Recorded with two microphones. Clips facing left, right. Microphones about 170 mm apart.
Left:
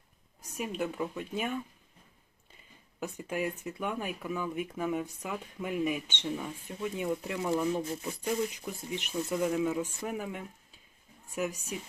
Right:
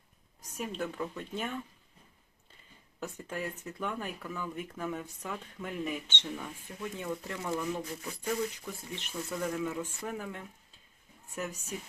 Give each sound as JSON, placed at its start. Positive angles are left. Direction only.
{"t": 0.5, "sound": "speech", "side_deg": 10}
{"t": 3.0, "sound": "speech", "side_deg": 15}